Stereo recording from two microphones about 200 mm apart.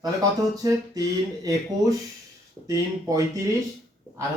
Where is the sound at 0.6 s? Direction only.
15° right (ahead or behind).